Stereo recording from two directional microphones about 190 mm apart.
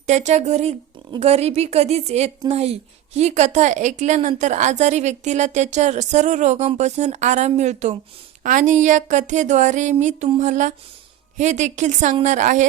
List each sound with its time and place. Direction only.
0.1 s a woman's voice: 40° right (ahead or behind)